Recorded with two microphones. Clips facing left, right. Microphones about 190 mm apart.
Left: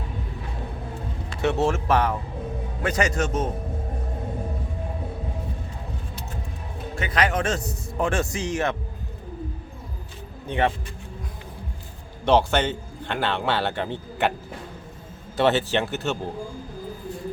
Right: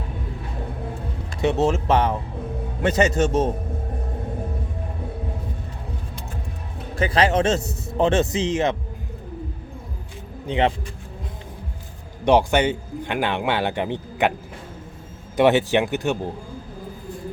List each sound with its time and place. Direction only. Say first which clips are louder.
1.4 s speech: right 2 dB; 20° right (ahead or behind)
7.0 s speech: right 5 dB; 30° right (ahead or behind)
12.2 s a man's voice: right 3 dB; 15° right (ahead or behind)
15.4 s a man's voice: right 4 dB; 15° right (ahead or behind)